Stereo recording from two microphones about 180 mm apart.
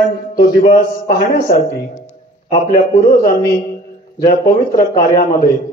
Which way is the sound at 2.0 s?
45° left (ahead or behind).